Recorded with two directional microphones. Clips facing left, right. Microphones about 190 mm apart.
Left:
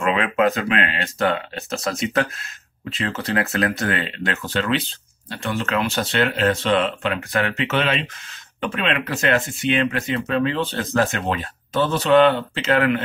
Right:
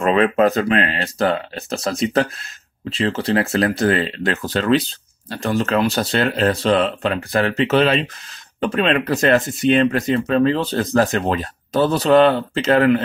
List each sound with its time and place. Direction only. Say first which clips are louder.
0.0 s speech: right 4 dB; 35° right (ahead or behind)